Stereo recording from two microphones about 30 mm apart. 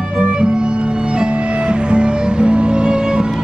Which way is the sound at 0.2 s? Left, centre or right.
Right.